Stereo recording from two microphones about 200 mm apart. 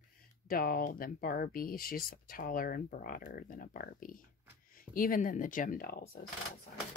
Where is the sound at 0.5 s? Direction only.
45° left (ahead or behind).